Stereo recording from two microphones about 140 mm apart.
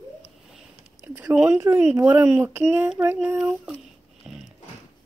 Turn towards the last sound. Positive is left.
turn(degrees=-5)  # may be behind; listen again after turning